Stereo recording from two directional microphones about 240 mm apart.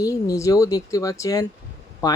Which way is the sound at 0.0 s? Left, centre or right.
Centre.